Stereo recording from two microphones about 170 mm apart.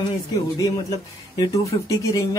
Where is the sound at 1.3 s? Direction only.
20° left (ahead or behind).